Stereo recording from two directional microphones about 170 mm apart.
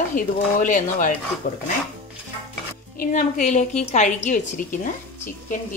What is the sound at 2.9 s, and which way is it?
A woman's voice, 55° left (ahead or behind).